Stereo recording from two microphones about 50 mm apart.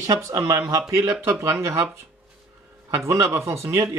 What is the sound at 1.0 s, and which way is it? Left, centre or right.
Speech, right.